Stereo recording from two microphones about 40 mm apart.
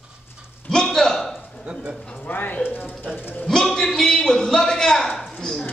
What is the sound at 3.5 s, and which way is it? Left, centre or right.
A man's voice, centre.